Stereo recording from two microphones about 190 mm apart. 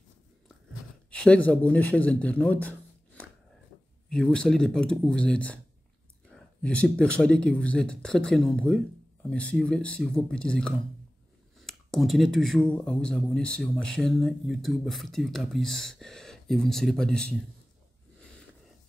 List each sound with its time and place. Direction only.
1.1 s a man's voice: 5° left (ahead or behind)
4.1 s speech: 5° left (ahead or behind)